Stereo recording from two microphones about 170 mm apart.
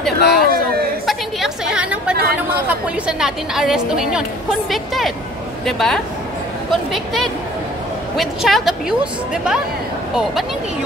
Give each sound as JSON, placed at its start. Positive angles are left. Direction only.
{"t": 0.2, "sound": "a sound", "side_deg": 65}
{"t": 1.0, "sound": "chatter", "side_deg": 0}
{"t": 2.7, "sound": "a woman's voice", "side_deg": -5}